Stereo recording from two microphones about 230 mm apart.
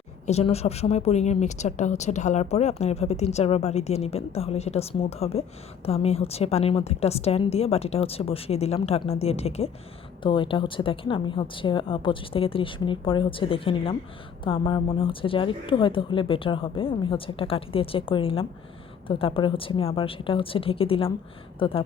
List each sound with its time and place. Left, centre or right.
0.3 s a woman's voice: left